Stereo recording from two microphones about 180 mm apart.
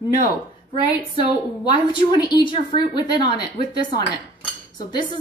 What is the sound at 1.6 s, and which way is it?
A woman's voice, 25° left (ahead or behind).